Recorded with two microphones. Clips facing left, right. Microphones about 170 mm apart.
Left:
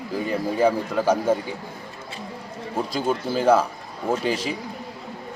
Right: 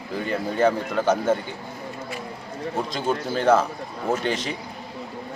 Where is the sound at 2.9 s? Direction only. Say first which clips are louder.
Left 3 dB; 10° left (ahead or behind).